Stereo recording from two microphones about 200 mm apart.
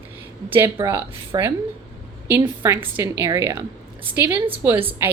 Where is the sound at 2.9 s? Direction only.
10° right (ahead or behind).